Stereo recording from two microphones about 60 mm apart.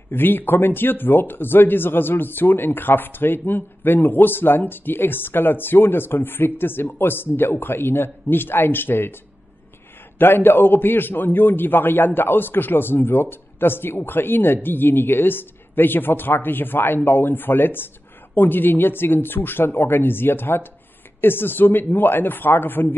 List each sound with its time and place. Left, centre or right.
0.1 s speech: left
10.1 s speech: left